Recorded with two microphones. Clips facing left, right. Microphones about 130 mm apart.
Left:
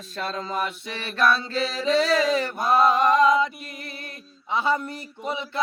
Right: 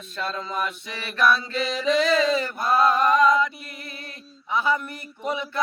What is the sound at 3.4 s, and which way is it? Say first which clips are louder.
Mantra: even; 30° left (ahead or behind).